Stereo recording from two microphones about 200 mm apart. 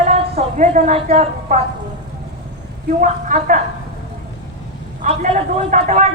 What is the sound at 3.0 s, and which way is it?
Speech, 40° right (ahead or behind).